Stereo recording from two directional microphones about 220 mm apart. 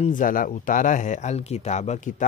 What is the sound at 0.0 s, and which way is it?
Speech, 35° left (ahead or behind).